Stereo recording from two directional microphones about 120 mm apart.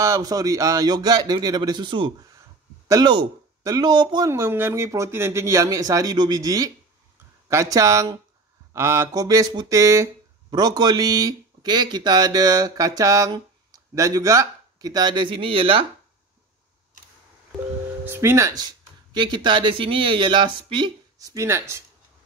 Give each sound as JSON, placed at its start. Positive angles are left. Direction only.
{"t": 0.0, "sound": "speech", "side_deg": -30}
{"t": 4.3, "sound": "speech", "side_deg": -20}
{"t": 18.0, "sound": "speech", "side_deg": -20}